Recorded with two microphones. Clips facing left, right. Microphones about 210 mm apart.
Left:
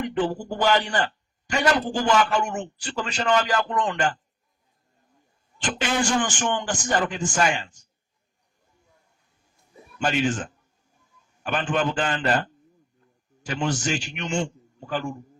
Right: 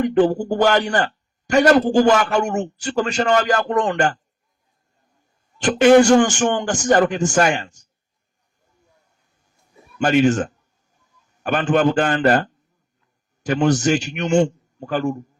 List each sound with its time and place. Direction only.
0.0 s a man's voice: 45° right (ahead or behind)
5.6 s a man's voice: 45° right (ahead or behind)
10.0 s speech: 60° right (ahead or behind)
11.7 s speech: 60° right (ahead or behind)
13.4 s a man's voice: 40° right (ahead or behind)